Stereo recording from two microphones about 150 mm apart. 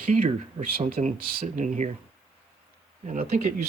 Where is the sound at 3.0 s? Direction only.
50° right (ahead or behind).